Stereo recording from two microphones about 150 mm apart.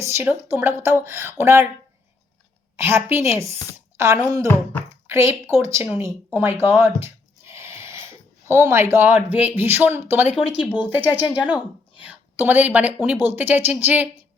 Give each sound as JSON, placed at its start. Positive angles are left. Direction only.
{"t": 0.0, "sound": "speech", "side_deg": -15}
{"t": 2.7, "sound": "speech", "side_deg": -15}
{"t": 7.5, "sound": "a sound", "side_deg": -20}
{"t": 8.4, "sound": "speech", "side_deg": -15}